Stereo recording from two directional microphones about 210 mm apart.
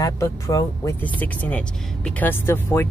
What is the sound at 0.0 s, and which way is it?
Speech, 15° left (ahead or behind).